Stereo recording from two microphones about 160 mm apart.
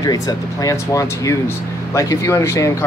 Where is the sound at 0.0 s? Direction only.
20° left (ahead or behind).